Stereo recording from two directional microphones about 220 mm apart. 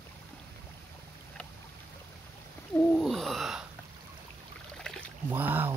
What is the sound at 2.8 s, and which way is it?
Gasp, centre (ahead or behind).